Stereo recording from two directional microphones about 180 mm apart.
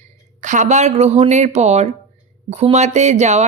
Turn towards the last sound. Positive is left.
turn(degrees=-40)  # may be behind; listen again after turning